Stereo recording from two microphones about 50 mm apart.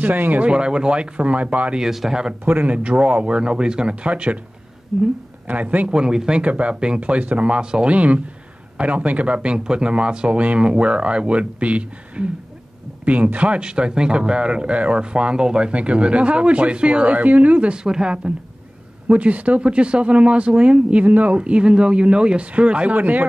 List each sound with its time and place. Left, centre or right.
0.0 s speech: right
0.5 s speech: centre
1.8 s speech: centre
2.4 s speech: right
2.7 s speech: right
4.9 s a woman's voice: centre
5.5 s speech: right
5.9 s speech: centre
7.0 s speech: right
19.0 s speech: right
21.4 s speech: right
22.9 s speech: right